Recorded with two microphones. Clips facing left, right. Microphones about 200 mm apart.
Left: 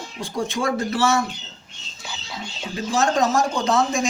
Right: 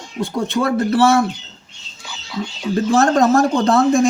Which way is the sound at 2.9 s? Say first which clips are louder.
Right 6 dB; 55° right (ahead or behind).